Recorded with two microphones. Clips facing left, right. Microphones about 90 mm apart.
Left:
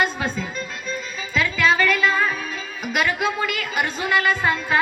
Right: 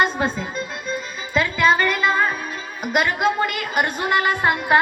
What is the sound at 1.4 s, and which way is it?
Music, 35° right (ahead or behind).